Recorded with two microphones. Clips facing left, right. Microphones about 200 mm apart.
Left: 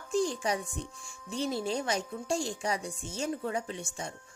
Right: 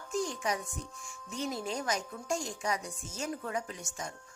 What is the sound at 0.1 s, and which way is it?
Music, 30° left (ahead or behind).